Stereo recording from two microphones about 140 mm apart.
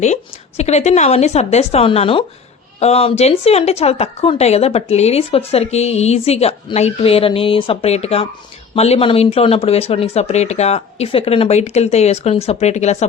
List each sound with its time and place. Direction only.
0.0 s speech: 50° left (ahead or behind)